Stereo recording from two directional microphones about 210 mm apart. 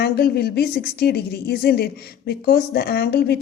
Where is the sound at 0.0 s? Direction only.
50° left (ahead or behind).